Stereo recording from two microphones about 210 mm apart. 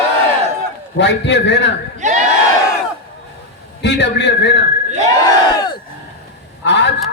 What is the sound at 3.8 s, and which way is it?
Speech, 55° left (ahead or behind).